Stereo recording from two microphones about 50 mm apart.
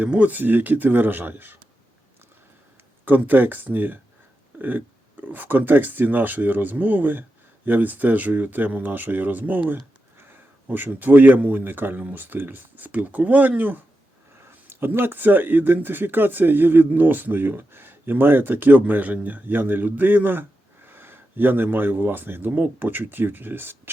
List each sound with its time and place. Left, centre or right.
0.0 s speech: right
3.0 s a man's voice: right
14.7 s speech: right